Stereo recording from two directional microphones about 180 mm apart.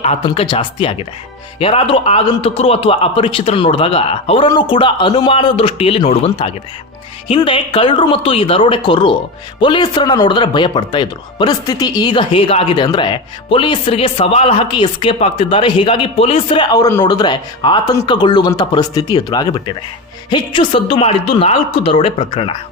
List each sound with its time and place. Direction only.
0.3 s a man's voice: 30° left (ahead or behind)